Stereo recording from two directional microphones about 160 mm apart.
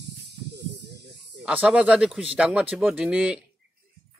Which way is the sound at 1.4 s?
5° right (ahead or behind).